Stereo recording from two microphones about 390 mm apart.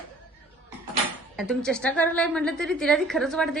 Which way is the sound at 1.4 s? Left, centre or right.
Centre.